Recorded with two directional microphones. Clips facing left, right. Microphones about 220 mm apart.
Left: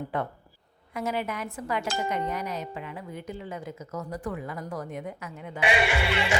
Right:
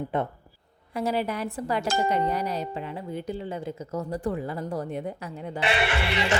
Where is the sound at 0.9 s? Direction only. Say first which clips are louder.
Right 3 dB; 35° right (ahead or behind).